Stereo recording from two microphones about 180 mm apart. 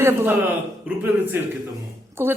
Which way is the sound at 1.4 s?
10° right (ahead or behind).